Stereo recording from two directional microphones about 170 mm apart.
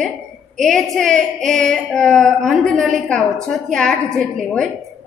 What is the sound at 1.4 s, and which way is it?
A woman's voice, 5° left (ahead or behind).